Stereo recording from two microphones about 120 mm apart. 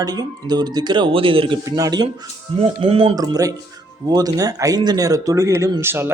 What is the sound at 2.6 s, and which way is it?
Speech, 45° right (ahead or behind).